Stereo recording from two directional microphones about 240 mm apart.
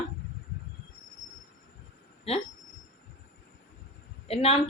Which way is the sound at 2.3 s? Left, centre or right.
Left.